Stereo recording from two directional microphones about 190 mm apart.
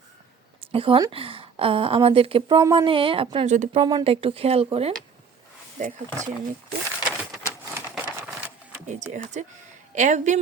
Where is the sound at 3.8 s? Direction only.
25° right (ahead or behind).